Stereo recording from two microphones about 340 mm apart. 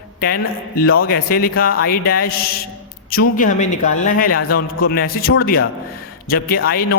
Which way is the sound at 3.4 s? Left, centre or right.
Left.